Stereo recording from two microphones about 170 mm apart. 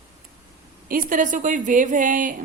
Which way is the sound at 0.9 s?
55° right (ahead or behind).